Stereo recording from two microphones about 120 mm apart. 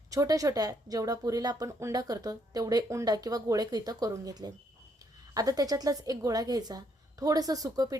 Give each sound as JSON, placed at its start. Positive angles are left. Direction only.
{"t": 0.1, "sound": "speech", "side_deg": -30}